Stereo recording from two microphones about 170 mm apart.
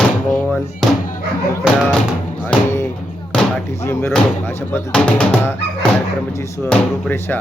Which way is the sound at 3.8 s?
15° left (ahead or behind).